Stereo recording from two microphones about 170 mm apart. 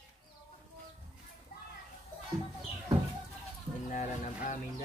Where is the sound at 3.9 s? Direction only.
50° left (ahead or behind).